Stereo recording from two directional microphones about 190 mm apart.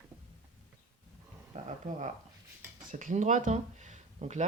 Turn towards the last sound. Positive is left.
turn(degrees=-35)  # may be behind; listen again after turning